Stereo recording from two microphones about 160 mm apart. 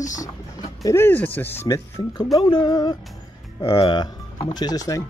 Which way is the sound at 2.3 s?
30° left (ahead or behind).